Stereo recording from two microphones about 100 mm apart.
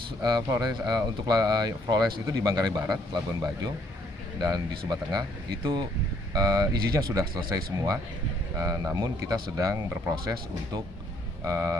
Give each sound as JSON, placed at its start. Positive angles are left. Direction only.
{"t": 0.5, "sound": "speech", "side_deg": -40}
{"t": 11.4, "sound": "speech", "side_deg": -30}